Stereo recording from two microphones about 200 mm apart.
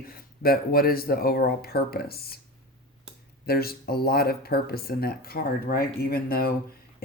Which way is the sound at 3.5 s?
50° left (ahead or behind).